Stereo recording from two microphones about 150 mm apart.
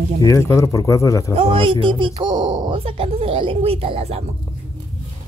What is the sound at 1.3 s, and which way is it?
Speech, 35° right (ahead or behind).